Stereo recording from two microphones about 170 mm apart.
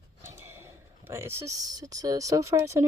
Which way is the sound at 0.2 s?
15° right (ahead or behind).